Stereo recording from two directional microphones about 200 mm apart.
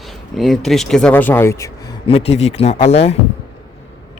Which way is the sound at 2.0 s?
30° left (ahead or behind).